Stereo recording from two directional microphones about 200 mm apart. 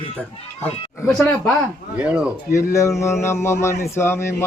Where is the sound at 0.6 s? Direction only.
5° left (ahead or behind).